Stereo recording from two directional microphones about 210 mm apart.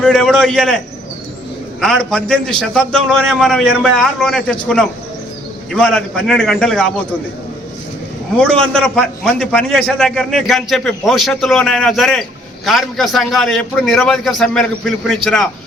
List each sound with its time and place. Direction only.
0.0 s a man's voice: 5° left (ahead or behind)
1.8 s a man's voice: centre (ahead or behind)
8.4 s a man's voice: 5° left (ahead or behind)